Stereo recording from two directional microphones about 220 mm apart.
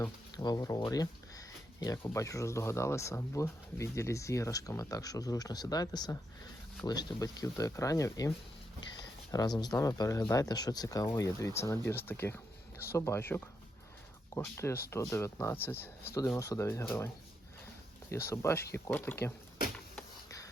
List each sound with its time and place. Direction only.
0.0 s speech: 15° left (ahead or behind)
9.3 s speech: 15° left (ahead or behind)
18.1 s speech: 10° left (ahead or behind)